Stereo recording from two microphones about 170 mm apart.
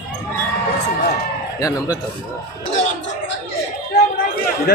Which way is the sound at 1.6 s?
20° left (ahead or behind).